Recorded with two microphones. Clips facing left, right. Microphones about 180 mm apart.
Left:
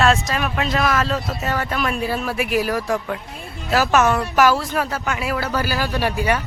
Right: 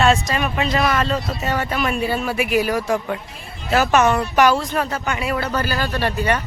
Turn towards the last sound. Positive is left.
turn(degrees=10)  # may be behind; listen again after turning